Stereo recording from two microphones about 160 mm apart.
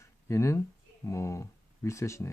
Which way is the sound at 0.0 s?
20° left (ahead or behind).